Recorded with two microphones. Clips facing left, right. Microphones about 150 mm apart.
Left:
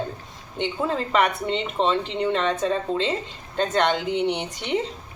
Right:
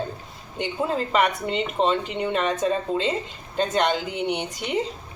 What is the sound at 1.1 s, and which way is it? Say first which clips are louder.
Speech: left 1 dB; 10° right (ahead or behind).